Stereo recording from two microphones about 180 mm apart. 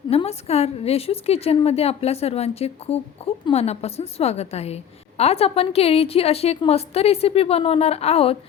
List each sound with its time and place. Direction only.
0.1 s a woman's voice: 35° left (ahead or behind)